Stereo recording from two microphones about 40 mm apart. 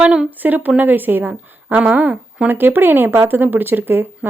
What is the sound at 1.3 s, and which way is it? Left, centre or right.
Speech, right.